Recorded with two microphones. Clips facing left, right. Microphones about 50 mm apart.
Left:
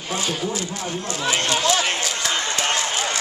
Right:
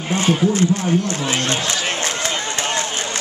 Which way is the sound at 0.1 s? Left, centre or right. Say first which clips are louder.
Right 7 dB; right.